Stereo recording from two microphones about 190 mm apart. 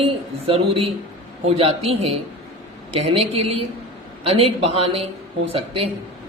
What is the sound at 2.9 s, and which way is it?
A man's voice, 30° right (ahead or behind).